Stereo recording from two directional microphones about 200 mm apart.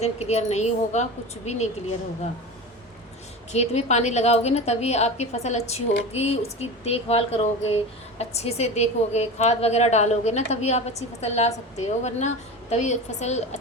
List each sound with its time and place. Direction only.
0.0 s a woman's voice: 35° left (ahead or behind)
3.5 s a woman's voice: 35° left (ahead or behind)